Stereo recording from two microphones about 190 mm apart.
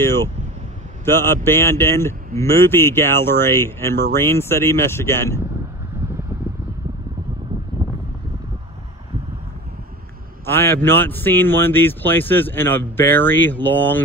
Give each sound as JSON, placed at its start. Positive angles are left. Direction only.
{"t": 0.0, "sound": "a sound", "side_deg": 15}
{"t": 1.0, "sound": "a man's voice", "side_deg": 15}
{"t": 7.8, "sound": "vehicle", "side_deg": -25}
{"t": 10.4, "sound": "a man's voice", "side_deg": 10}